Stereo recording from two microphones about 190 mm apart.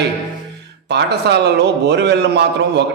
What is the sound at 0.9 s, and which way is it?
A man's voice, 65° right (ahead or behind).